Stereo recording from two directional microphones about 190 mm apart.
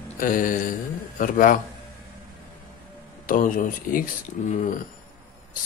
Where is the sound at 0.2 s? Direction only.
45° left (ahead or behind).